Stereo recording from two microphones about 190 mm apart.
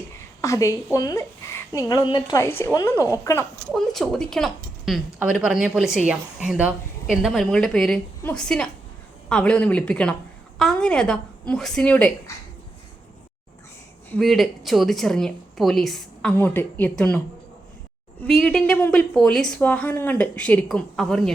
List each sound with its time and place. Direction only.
0.4 s a woman's voice: 15° left (ahead or behind)
3.7 s a woman's voice: centre (ahead or behind)
14.1 s a woman's voice: centre (ahead or behind)
18.2 s a woman's voice: 5° left (ahead or behind)